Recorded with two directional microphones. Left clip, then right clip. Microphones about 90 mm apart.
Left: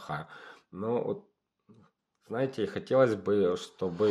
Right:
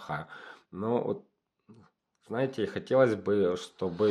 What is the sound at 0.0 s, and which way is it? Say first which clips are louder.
Speech: right 1 dB; 20° right (ahead or behind).